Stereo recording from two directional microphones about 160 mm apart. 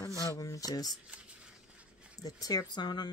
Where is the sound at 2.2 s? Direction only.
25° left (ahead or behind).